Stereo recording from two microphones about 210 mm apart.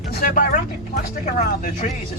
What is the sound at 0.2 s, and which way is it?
Speech, 40° left (ahead or behind).